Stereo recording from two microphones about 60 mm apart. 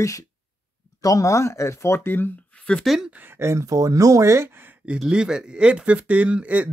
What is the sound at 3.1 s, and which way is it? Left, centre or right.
Speech, right.